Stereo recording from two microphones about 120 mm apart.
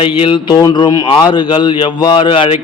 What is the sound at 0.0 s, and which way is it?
Speech, 45° left (ahead or behind).